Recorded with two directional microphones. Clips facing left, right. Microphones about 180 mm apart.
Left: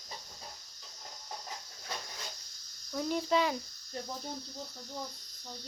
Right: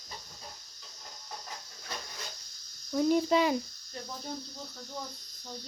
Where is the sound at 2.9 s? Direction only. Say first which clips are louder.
Right 5 dB; 5° right (ahead or behind).